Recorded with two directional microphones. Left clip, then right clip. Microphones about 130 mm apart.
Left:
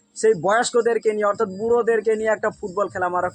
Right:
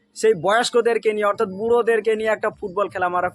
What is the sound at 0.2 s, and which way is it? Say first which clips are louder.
Speech: even; 5° right (ahead or behind).